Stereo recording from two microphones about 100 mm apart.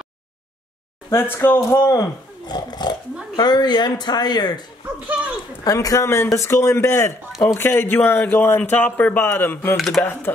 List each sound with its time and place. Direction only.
1.1 s a man's voice: 20° left (ahead or behind)
1.7 s a man's voice: 35° left (ahead or behind)
9.8 s speech: centre (ahead or behind)
10.3 s a man's voice: 20° left (ahead or behind)